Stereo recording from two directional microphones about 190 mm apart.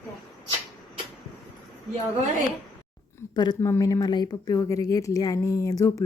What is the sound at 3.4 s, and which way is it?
Speech, 20° left (ahead or behind).